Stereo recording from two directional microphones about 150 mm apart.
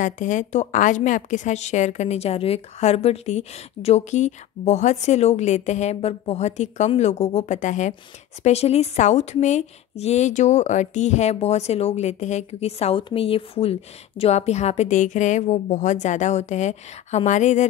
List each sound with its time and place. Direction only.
0.0 s a woman's voice: 55° left (ahead or behind)